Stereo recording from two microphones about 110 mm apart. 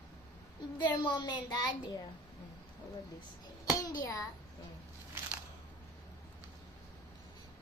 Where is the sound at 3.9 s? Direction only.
30° left (ahead or behind).